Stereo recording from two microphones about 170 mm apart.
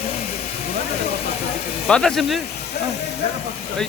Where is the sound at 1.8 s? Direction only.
5° left (ahead or behind).